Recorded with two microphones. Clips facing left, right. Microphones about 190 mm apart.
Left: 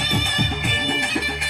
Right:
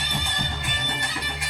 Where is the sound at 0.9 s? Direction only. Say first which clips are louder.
Left 8 dB; 90° left.